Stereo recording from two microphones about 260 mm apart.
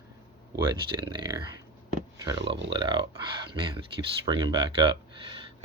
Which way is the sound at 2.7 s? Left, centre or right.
Centre.